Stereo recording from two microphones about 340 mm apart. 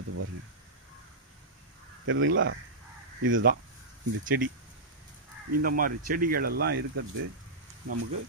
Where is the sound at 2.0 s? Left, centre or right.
Right.